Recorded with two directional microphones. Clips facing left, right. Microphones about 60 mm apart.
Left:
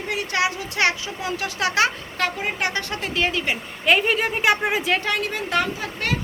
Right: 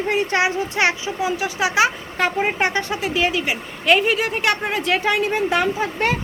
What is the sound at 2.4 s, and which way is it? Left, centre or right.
Speech, right.